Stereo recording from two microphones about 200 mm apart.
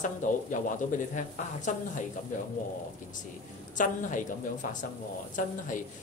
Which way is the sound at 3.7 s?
40° left (ahead or behind).